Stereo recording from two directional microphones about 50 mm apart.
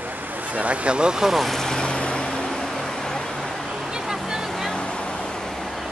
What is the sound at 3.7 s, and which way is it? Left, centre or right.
Vehicle, centre.